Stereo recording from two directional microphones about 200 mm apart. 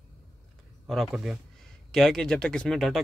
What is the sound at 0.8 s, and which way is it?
Speech, centre (ahead or behind).